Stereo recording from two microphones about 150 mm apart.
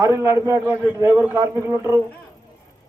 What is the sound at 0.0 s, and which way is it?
A man's voice, 20° right (ahead or behind).